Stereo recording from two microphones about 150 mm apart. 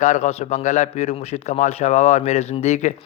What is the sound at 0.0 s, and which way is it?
A man's voice, 50° left (ahead or behind).